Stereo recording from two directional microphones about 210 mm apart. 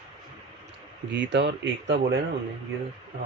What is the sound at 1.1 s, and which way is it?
Speech, 55° right (ahead or behind).